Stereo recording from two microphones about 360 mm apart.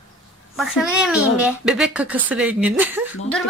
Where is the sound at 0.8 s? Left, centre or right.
Centre.